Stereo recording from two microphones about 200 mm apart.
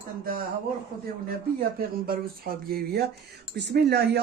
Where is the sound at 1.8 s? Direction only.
50° right (ahead or behind).